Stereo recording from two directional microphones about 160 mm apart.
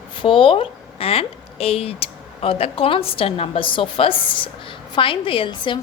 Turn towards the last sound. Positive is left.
turn(degrees=30)  # may be behind; listen again after turning